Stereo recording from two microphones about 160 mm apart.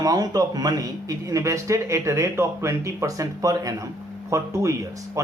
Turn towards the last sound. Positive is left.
turn(degrees=-20)  # may be behind; listen again after turning